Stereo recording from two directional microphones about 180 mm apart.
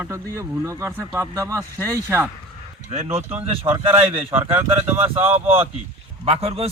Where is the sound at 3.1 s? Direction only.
30° right (ahead or behind).